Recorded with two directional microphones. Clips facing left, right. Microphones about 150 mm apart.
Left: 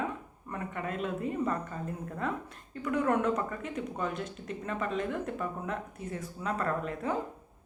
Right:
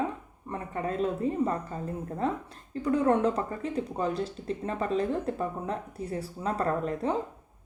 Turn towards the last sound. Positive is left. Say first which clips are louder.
# right 4 dB
turn(degrees=-35)  # may be behind; listen again after turning